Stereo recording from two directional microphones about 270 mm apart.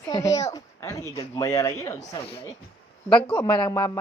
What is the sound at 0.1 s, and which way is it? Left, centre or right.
A woman's voice, centre.